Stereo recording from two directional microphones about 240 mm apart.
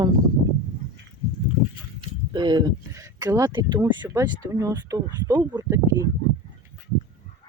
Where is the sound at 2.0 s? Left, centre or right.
Centre.